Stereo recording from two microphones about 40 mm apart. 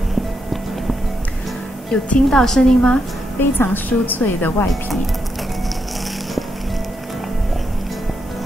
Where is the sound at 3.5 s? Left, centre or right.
Left.